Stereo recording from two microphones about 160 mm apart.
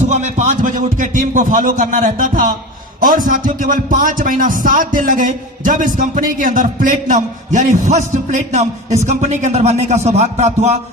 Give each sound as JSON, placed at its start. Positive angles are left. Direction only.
{"t": 0.0, "sound": "speech", "side_deg": -50}